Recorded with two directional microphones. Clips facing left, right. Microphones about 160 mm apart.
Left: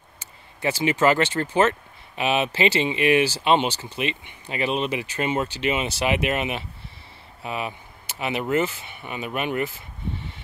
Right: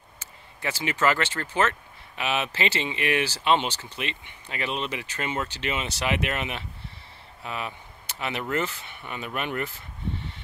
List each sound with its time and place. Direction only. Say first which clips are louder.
0.6 s speech: left 6 dB; 20° left (ahead or behind)